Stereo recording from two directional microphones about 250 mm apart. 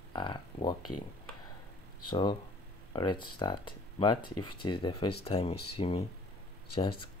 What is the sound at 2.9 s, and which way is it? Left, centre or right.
Speech, centre.